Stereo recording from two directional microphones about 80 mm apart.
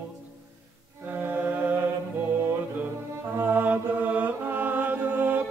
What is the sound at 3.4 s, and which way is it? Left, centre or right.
Mantra, right.